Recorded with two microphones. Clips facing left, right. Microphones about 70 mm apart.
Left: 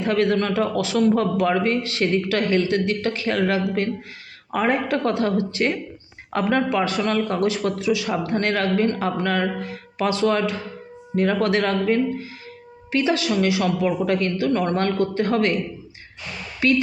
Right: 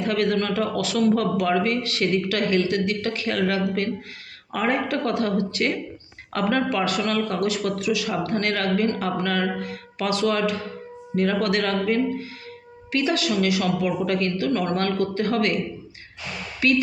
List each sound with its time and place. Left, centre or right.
0.0 s a man's voice: left
16.6 s music: left